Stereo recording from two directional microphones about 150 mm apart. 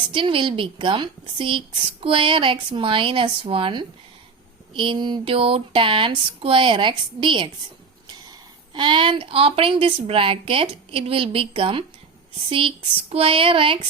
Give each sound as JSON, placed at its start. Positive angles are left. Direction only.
{"t": 0.1, "sound": "a woman's voice", "side_deg": -35}